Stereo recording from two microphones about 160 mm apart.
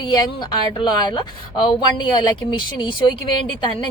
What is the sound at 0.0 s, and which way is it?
A woman's voice, 25° left (ahead or behind).